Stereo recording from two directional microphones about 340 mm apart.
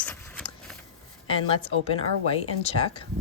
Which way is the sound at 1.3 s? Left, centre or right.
Centre.